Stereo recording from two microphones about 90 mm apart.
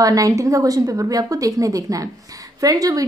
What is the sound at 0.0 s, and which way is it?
A woman's voice, 40° right (ahead or behind).